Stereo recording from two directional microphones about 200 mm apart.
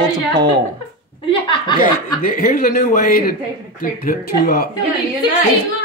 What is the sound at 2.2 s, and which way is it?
Speech, 45° left (ahead or behind).